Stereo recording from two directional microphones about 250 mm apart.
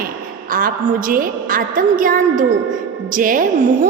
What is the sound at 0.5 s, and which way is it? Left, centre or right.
A woman's voice, right.